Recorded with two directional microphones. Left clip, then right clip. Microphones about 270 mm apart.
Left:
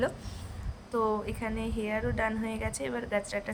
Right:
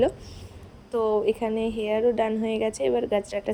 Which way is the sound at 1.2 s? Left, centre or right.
Centre.